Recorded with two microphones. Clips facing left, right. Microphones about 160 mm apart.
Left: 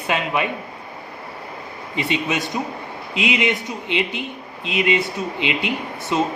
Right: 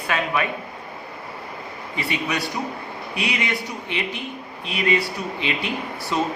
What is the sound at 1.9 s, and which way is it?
Speech, 20° left (ahead or behind).